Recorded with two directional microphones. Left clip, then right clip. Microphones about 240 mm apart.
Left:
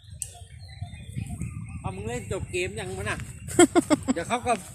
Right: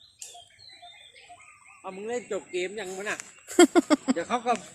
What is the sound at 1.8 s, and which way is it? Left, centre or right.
Speech, left.